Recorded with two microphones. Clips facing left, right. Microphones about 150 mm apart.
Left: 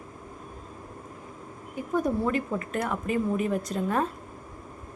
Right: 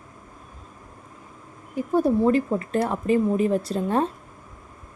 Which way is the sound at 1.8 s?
30° right (ahead or behind).